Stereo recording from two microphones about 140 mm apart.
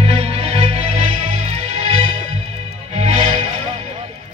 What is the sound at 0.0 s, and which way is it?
Music, 45° right (ahead or behind).